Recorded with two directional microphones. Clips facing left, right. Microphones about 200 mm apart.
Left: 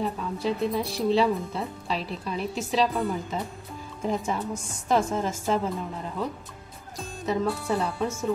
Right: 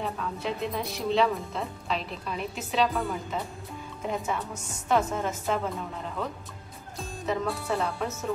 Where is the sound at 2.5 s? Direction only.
30° left (ahead or behind).